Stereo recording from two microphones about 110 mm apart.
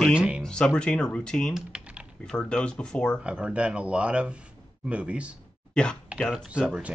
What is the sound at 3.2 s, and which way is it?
Speech, 10° right (ahead or behind).